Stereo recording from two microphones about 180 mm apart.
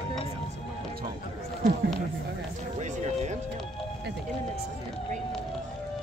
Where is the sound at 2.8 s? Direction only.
40° right (ahead or behind).